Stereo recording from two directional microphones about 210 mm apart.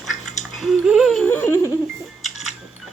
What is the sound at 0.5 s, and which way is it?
Music, centre (ahead or behind).